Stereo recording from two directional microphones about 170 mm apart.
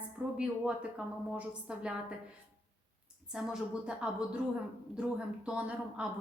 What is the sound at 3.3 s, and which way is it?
A woman's voice, 5° right (ahead or behind).